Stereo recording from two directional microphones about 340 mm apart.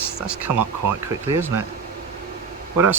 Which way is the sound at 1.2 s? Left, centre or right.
Centre.